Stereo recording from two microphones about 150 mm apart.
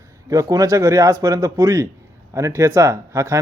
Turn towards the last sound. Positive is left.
turn(degrees=-20)  # may be behind; listen again after turning